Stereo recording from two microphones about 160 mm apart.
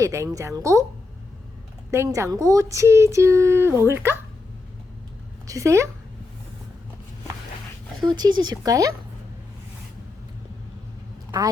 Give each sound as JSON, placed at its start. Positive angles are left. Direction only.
{"t": 0.0, "sound": "speech", "side_deg": -15}
{"t": 1.9, "sound": "speech", "side_deg": -15}
{"t": 5.5, "sound": "speech", "side_deg": -20}
{"t": 8.0, "sound": "speech", "side_deg": -25}